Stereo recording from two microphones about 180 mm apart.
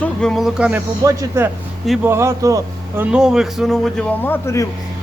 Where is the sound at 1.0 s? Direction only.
15° right (ahead or behind).